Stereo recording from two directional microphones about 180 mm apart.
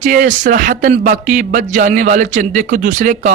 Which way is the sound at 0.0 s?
45° right (ahead or behind).